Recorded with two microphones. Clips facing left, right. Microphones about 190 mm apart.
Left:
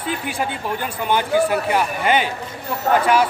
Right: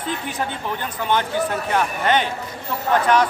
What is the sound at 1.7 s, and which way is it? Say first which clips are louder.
Speech: left 1 dB; 10° left (ahead or behind).